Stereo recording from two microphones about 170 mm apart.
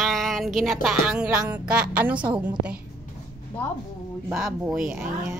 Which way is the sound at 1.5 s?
10° right (ahead or behind).